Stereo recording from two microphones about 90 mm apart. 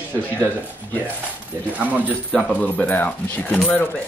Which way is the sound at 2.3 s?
15° left (ahead or behind).